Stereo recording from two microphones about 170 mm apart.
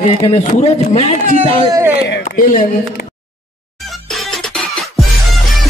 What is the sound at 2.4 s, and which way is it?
Speech, 55° left (ahead or behind).